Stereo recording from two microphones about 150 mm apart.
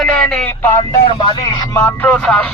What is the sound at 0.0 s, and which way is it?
Speech, 5° left (ahead or behind).